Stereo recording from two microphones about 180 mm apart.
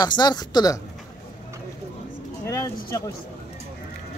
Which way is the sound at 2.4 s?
15° left (ahead or behind).